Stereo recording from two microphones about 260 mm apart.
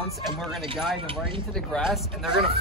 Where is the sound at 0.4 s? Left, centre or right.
Centre.